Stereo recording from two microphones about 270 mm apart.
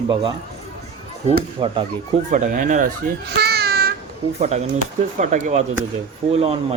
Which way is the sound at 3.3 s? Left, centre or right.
Right.